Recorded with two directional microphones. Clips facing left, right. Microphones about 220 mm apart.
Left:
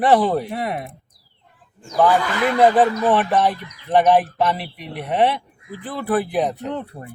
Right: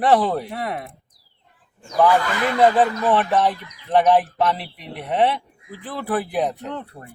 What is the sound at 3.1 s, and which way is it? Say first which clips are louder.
Speech: left 1 dB; 5° left (ahead or behind).